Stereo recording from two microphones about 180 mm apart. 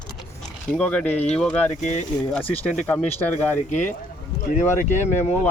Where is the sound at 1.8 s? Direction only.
40° left (ahead or behind).